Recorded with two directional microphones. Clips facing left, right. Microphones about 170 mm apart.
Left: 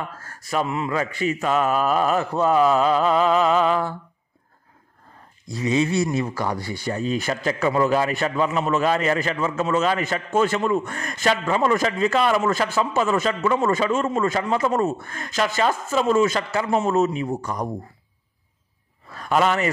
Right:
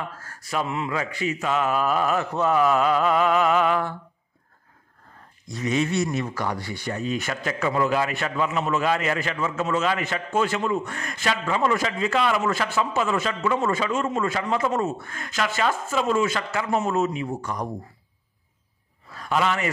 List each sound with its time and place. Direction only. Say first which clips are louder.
0.5 s a man's voice: left 3 dB; 40° left (ahead or behind)
5.5 s a man's voice: left 3 dB; 30° left (ahead or behind)
19.1 s a man's voice: left 4 dB; 50° left (ahead or behind)